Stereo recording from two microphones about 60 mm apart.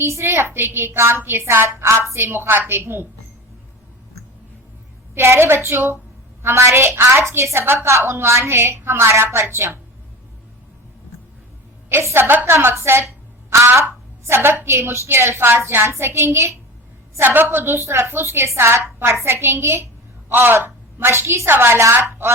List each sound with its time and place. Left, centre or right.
0.0 s a woman's voice: right
5.1 s a woman's voice: right
7.9 s a woman's voice: right
11.9 s a woman's voice: right
12.3 s a woman's voice: right
12.5 s a woman's voice: right
17.7 s a woman's voice: right